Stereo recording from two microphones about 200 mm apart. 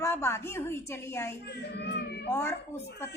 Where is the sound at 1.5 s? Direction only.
55° left (ahead or behind).